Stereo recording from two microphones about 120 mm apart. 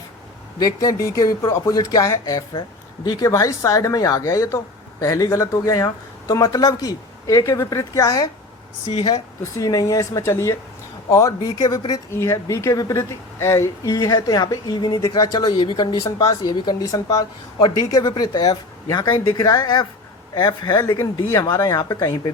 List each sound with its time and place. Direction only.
0.6 s a woman's voice: 30° left (ahead or behind)